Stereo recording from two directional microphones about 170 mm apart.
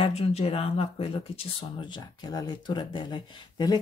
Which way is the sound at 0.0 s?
35° left (ahead or behind).